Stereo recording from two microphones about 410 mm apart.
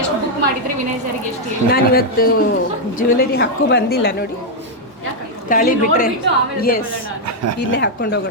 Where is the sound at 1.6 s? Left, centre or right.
Left.